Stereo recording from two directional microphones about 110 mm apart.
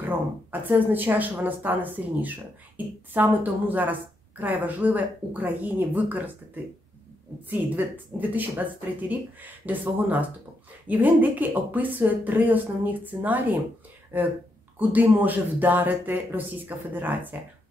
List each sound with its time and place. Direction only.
0.0 s speech: 15° right (ahead or behind)